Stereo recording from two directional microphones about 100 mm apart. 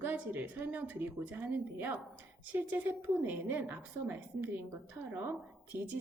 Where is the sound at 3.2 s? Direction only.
15° right (ahead or behind).